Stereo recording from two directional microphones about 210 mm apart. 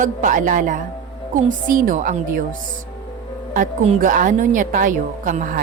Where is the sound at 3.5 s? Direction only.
40° right (ahead or behind).